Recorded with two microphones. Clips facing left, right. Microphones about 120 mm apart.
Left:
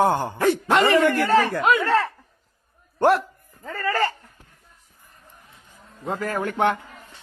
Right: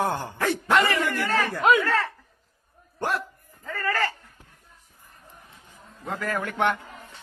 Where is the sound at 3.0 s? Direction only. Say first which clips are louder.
Left 10 dB; 70° left (ahead or behind).